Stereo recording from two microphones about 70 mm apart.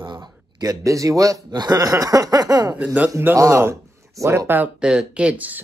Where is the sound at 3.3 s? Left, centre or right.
Right.